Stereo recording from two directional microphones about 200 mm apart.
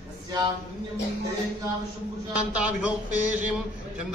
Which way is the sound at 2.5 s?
5° right (ahead or behind).